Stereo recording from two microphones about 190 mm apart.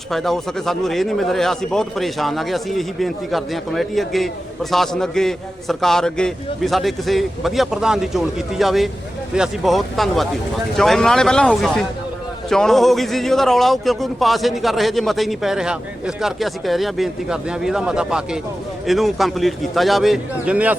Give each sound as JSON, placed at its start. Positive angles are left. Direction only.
{"t": 0.1, "sound": "a man's voice", "side_deg": 0}